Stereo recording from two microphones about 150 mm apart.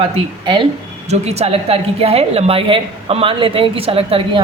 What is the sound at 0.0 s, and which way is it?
Speech, 30° right (ahead or behind).